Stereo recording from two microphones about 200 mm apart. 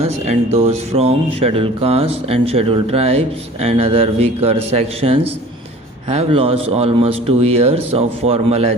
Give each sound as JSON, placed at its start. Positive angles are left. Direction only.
{"t": 0.0, "sound": "speech", "side_deg": -30}